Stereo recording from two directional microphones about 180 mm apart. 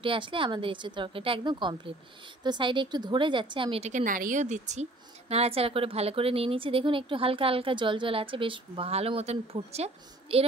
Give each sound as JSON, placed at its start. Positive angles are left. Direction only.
{"t": 0.0, "sound": "a woman's voice", "side_deg": -30}